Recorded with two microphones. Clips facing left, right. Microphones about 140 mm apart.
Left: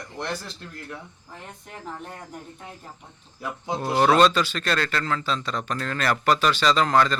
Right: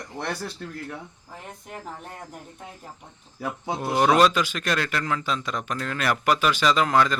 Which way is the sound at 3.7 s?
10° right (ahead or behind).